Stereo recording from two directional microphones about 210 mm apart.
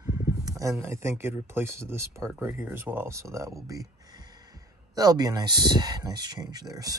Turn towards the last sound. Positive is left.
turn(degrees=-20)  # may be behind; listen again after turning